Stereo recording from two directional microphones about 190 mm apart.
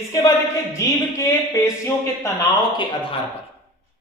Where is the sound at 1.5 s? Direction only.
15° left (ahead or behind).